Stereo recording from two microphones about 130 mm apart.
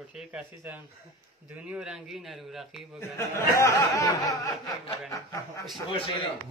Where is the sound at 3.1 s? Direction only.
25° left (ahead or behind).